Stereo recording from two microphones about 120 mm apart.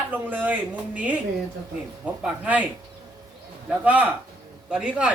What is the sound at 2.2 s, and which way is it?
Speech, 10° right (ahead or behind).